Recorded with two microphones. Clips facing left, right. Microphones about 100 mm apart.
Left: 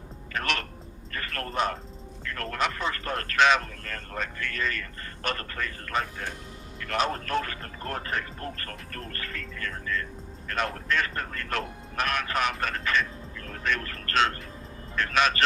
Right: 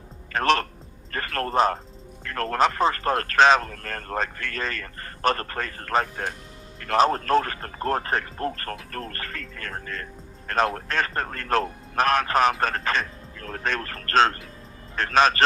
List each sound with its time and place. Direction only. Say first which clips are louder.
0.3 s music: right 9 dB; 35° right (ahead or behind)
1.1 s a man's voice: right 7 dB; 40° right (ahead or behind)